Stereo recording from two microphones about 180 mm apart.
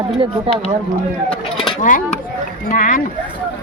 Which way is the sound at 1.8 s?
45° left (ahead or behind).